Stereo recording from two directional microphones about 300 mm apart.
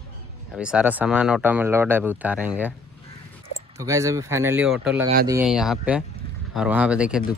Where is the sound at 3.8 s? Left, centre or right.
Centre.